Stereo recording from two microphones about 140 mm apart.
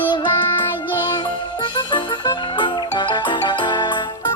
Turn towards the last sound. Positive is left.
turn(degrees=35)  # may be behind; listen again after turning